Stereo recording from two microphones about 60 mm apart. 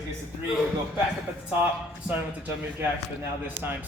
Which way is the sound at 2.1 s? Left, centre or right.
Right.